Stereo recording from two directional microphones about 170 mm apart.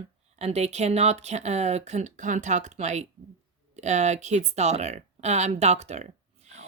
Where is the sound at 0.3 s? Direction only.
40° right (ahead or behind).